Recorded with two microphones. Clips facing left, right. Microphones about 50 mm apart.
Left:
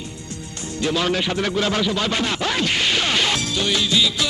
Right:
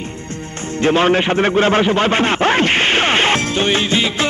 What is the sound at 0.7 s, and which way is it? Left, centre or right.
Music, right.